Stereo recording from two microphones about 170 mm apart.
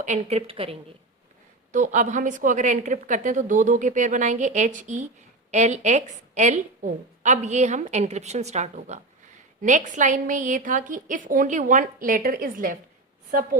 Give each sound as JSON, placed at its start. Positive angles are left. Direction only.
{"t": 0.0, "sound": "a woman's voice", "side_deg": -45}
{"t": 1.7, "sound": "a woman's voice", "side_deg": -45}